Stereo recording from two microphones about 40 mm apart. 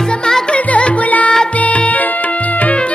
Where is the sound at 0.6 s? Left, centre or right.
Left.